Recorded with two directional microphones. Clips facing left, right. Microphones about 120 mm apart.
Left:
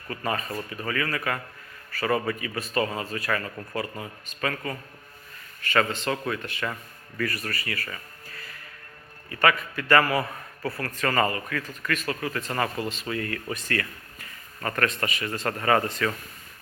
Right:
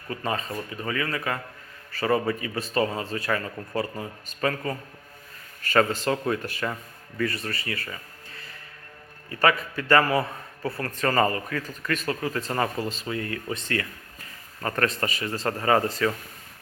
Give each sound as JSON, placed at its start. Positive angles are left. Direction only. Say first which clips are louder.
{"t": 0.1, "sound": "speech", "louder": "even", "side_deg": -25}
{"t": 7.2, "sound": "speech", "louder": "right 2 dB", "side_deg": -25}